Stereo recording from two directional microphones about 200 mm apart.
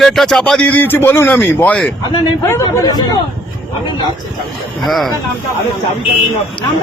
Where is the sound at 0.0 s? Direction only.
Centre (ahead or behind); by 3.2 s 20° left (ahead or behind).